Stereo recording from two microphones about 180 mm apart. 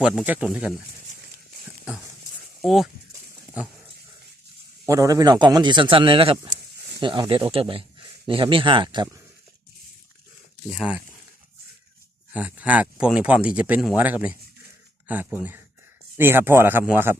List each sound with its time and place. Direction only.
0.0 s speech: 5° right (ahead or behind)
2.6 s speech: centre (ahead or behind)
3.1 s a sound: 10° right (ahead or behind)
4.9 s speech: 20° right (ahead or behind)
10.7 s speech: 5° right (ahead or behind)
12.3 s speech: 10° right (ahead or behind)